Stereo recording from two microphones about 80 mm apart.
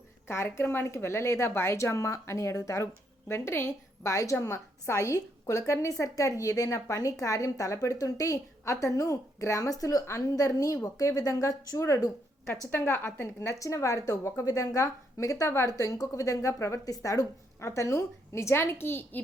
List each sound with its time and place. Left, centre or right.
0.3 s a woman's voice: left
12.7 s a woman's voice: left